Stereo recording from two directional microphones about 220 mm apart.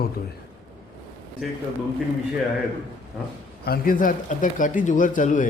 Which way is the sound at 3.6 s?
40° left (ahead or behind).